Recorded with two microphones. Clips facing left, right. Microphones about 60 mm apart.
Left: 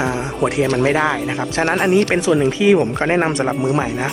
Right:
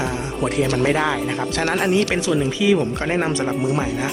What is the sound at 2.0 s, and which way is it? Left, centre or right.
A man's voice, left.